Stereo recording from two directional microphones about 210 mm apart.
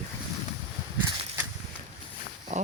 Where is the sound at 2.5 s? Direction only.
35° right (ahead or behind).